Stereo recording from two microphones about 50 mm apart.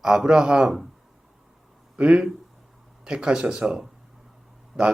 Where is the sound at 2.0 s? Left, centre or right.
Centre.